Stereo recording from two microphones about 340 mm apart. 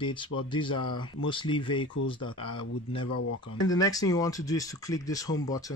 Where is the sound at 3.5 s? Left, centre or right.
Centre.